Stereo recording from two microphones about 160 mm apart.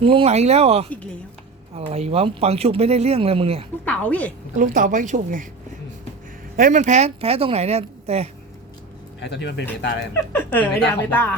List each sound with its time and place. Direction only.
0.0 s speech: 35° right (ahead or behind)
3.8 s a woman's voice: 10° left (ahead or behind)
4.5 s speech: 55° right (ahead or behind)
6.6 s speech: 50° right (ahead or behind)
9.2 s speech: 90° left
10.3 s a woman's voice: 10° left (ahead or behind)